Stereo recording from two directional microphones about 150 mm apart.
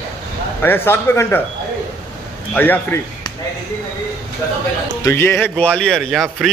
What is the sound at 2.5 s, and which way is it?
Speech, 10° left (ahead or behind).